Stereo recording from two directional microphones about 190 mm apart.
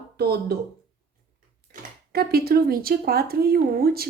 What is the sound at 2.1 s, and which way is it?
Speech, 55° right (ahead or behind).